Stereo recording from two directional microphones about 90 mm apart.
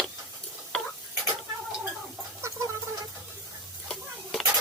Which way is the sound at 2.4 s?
35° right (ahead or behind).